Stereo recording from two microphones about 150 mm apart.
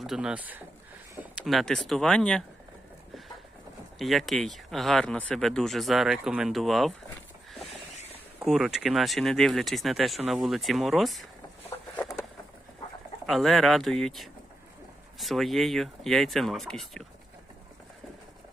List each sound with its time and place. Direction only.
0.0 s speech: 5° right (ahead or behind)
1.4 s speech: centre (ahead or behind)
3.9 s speech: centre (ahead or behind)
8.4 s speech: centre (ahead or behind)
11.7 s a sound: 20° left (ahead or behind)
13.2 s speech: centre (ahead or behind)